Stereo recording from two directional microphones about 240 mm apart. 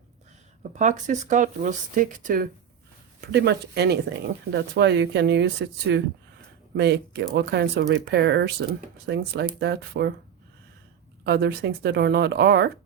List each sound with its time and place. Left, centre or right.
0.7 s speech: right
11.2 s speech: right